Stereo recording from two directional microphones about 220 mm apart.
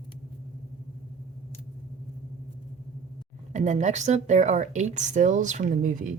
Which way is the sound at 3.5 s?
35° right (ahead or behind).